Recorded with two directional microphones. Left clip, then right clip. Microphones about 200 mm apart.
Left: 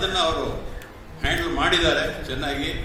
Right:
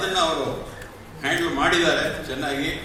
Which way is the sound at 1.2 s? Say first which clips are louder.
Right 1 dB; 35° left (ahead or behind).